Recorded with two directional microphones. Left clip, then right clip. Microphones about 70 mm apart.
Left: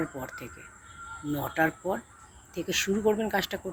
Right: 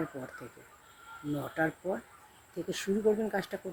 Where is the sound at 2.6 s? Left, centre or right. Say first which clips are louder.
Left 3 dB; right.